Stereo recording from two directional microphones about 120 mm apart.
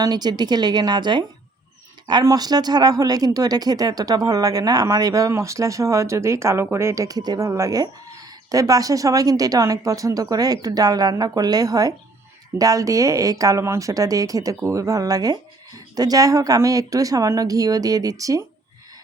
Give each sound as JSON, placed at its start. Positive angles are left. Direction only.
{"t": 0.0, "sound": "speech", "side_deg": -35}